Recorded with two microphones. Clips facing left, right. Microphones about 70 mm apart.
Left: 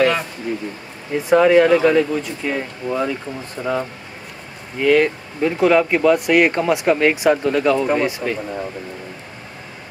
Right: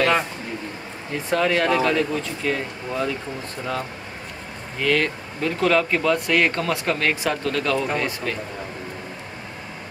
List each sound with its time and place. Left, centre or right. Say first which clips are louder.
1.3 s speech: left 8 dB; centre
4.7 s speech: left 7 dB; centre